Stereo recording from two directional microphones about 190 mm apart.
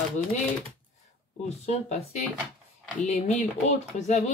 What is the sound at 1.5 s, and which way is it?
Speech, 35° left (ahead or behind).